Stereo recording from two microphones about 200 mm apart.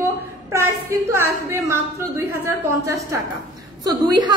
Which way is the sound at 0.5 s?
10° right (ahead or behind).